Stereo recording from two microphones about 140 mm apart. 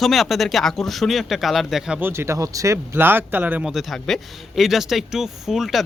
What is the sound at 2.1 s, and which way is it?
Speech, 20° right (ahead or behind).